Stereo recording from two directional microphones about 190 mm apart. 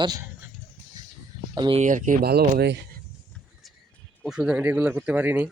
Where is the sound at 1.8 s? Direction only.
40° right (ahead or behind).